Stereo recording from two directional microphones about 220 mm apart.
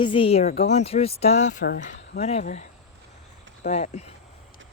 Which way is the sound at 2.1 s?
30° left (ahead or behind).